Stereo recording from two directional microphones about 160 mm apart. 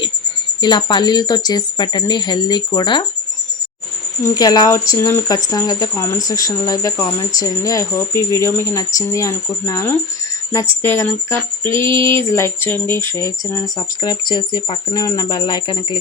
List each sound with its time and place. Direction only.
0.6 s speech: 25° left (ahead or behind)
4.2 s speech: 25° left (ahead or behind)